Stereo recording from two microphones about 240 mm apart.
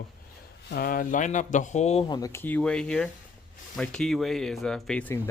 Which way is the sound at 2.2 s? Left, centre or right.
Centre.